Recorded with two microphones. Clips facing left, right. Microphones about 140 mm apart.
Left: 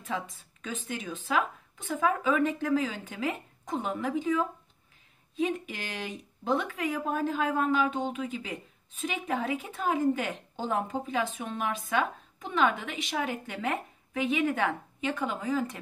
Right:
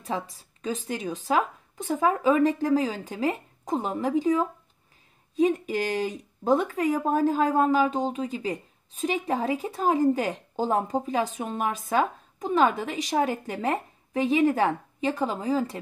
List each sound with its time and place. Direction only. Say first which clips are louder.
0.0 s speech: right 3 dB; 35° right (ahead or behind)